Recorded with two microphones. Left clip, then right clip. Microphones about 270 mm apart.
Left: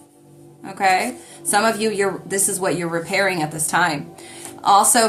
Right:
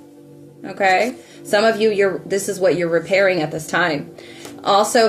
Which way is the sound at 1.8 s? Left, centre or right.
Centre.